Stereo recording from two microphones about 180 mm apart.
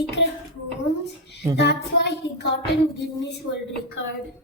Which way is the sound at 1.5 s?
70° left (ahead or behind).